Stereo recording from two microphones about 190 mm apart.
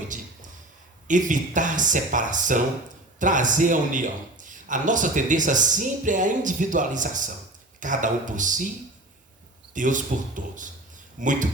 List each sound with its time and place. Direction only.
0.1 s a sound: 40° right (ahead or behind)
1.0 s a man's voice: 40° right (ahead or behind)
9.7 s a man's voice: 40° right (ahead or behind)